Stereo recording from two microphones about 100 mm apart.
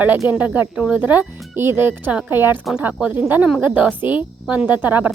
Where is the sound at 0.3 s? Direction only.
15° right (ahead or behind).